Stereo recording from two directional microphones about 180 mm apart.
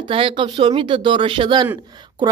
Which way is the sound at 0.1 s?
30° right (ahead or behind).